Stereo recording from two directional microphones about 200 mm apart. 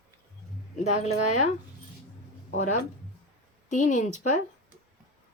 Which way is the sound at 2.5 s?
40° left (ahead or behind).